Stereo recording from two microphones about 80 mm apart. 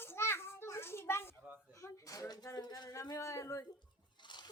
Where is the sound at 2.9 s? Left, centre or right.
Left.